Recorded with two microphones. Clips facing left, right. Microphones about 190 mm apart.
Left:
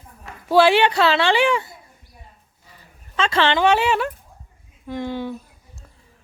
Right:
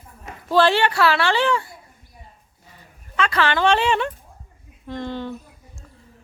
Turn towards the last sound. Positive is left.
turn(degrees=10)  # may be behind; listen again after turning